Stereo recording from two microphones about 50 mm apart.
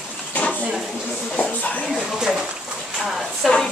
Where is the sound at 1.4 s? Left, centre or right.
Left.